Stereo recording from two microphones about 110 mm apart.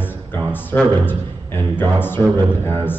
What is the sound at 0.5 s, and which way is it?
A man's voice, 15° left (ahead or behind).